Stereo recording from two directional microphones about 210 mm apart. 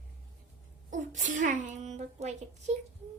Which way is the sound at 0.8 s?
35° right (ahead or behind).